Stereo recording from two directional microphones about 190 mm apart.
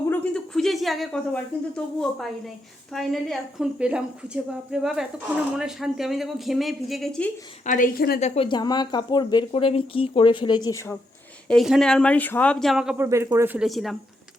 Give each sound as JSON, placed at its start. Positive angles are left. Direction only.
{"t": 0.1, "sound": "speech", "side_deg": 5}
{"t": 7.6, "sound": "a woman's voice", "side_deg": 45}
{"t": 8.2, "sound": "speech", "side_deg": 25}
{"t": 11.4, "sound": "speech", "side_deg": 0}
{"t": 13.1, "sound": "speech", "side_deg": -15}